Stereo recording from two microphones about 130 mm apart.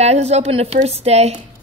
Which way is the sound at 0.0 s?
55° right (ahead or behind).